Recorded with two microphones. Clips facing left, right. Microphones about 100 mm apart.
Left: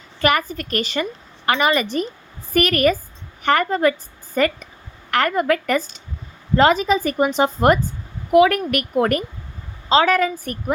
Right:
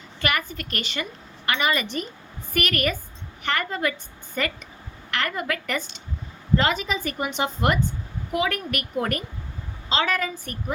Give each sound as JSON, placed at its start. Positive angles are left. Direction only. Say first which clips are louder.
{"t": 0.2, "sound": "a woman's voice", "louder": "left 8 dB", "side_deg": 40}
{"t": 8.3, "sound": "speech", "louder": "left 12 dB", "side_deg": 55}